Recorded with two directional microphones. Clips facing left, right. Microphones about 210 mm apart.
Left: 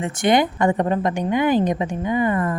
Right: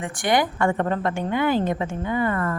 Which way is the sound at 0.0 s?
20° left (ahead or behind).